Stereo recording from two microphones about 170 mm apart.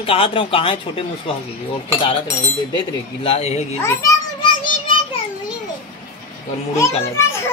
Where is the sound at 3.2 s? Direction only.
35° left (ahead or behind).